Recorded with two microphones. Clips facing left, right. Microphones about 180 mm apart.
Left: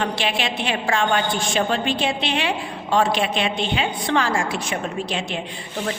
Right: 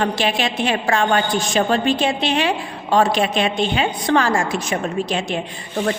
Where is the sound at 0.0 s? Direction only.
40° right (ahead or behind).